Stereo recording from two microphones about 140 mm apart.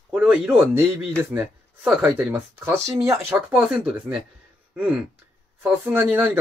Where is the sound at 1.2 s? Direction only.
20° right (ahead or behind).